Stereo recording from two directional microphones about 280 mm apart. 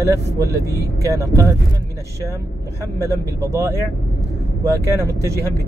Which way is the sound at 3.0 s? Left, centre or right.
Centre.